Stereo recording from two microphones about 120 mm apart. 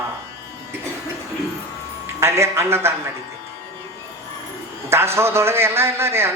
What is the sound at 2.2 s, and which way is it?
Speech, 25° right (ahead or behind).